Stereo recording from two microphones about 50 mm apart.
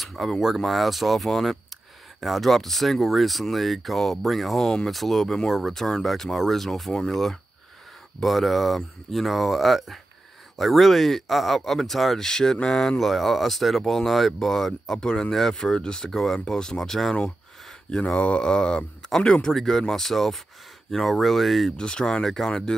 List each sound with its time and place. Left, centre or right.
0.0 s a sound: centre
0.6 s speech: centre
15.0 s speech: centre
17.9 s speech: centre
21.7 s speech: centre